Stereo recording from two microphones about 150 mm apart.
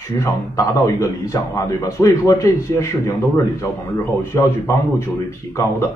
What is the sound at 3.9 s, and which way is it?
Speech, 15° left (ahead or behind).